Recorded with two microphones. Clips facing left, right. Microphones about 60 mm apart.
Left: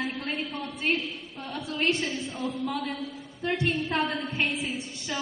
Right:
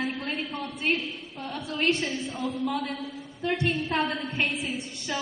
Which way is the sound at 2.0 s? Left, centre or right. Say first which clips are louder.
Right 1 dB; centre.